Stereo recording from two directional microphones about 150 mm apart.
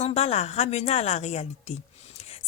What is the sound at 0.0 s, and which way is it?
Speech, 45° left (ahead or behind).